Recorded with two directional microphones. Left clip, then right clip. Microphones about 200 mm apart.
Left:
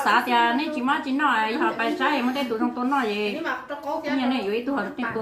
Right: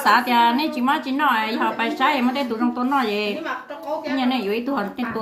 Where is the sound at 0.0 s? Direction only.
60° right (ahead or behind).